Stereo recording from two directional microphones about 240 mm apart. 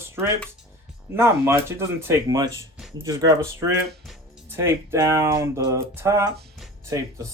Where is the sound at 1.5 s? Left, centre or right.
Centre.